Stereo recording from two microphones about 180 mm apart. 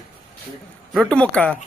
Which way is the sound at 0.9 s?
5° left (ahead or behind).